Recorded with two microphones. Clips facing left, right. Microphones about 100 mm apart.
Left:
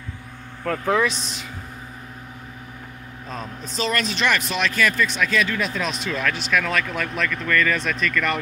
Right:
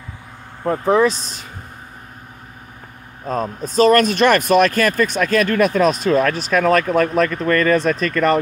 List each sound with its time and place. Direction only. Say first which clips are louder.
0.7 s speech: right 6 dB; 30° right (ahead or behind)
3.3 s speech: right 11 dB; 45° right (ahead or behind)